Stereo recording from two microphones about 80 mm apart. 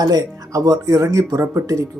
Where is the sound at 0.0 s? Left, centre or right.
Right.